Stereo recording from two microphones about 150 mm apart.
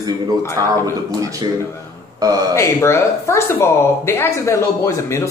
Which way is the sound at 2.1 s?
25° right (ahead or behind).